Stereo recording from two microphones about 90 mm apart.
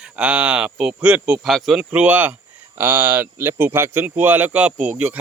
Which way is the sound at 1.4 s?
Centre (ahead or behind).